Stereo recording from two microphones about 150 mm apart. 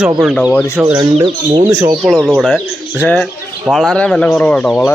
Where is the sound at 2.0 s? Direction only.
Centre (ahead or behind).